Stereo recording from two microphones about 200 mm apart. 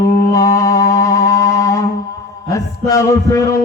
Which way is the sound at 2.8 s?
15° left (ahead or behind).